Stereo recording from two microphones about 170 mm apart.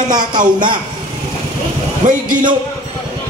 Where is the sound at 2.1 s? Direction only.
50° right (ahead or behind).